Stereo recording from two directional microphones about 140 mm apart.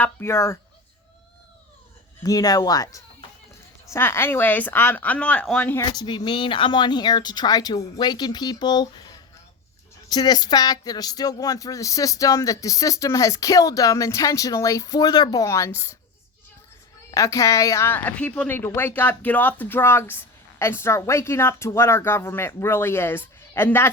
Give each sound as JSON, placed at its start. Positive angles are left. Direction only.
{"t": 0.0, "sound": "speech", "side_deg": 15}
{"t": 2.2, "sound": "speech", "side_deg": 25}
{"t": 5.8, "sound": "speech", "side_deg": 30}
{"t": 17.1, "sound": "speech", "side_deg": 20}